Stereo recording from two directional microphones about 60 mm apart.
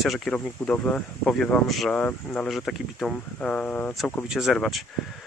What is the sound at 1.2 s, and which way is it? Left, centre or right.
Speech, centre.